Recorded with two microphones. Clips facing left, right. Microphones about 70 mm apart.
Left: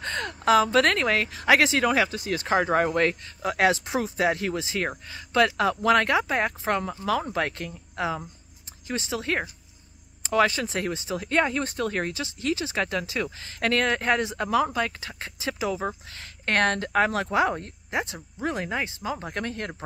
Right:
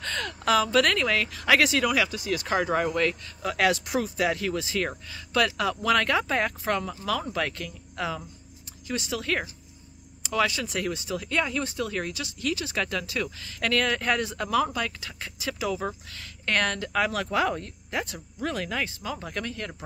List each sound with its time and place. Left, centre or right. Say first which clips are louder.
0.0 s speech: left 2 dB; left